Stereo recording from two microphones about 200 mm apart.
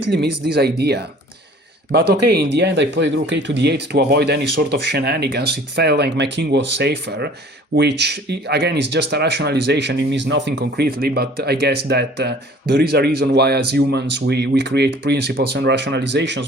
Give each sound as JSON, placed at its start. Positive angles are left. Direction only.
{"t": 0.1, "sound": "speech", "side_deg": -55}